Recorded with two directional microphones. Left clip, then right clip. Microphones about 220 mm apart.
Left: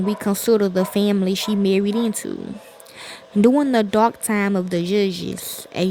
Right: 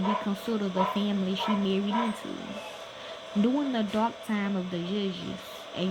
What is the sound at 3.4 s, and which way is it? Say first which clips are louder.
Speech: left 12 dB; 55° left (ahead or behind).